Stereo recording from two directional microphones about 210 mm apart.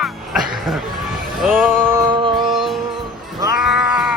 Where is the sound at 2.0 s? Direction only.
25° right (ahead or behind).